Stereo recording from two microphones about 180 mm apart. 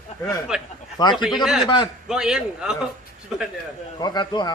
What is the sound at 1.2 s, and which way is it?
A man's voice, 5° right (ahead or behind).